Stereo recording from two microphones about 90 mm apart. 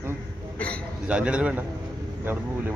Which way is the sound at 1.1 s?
15° right (ahead or behind).